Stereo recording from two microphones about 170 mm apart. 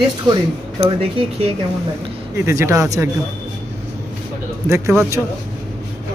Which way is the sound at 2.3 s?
15° right (ahead or behind).